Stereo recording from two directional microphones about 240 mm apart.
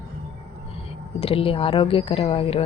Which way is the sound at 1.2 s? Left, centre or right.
Left.